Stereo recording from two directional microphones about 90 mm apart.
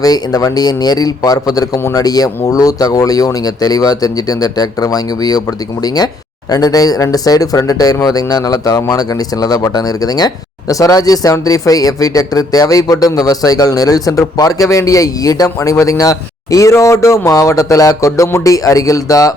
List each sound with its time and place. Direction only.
0.0 s speech: 45° left (ahead or behind)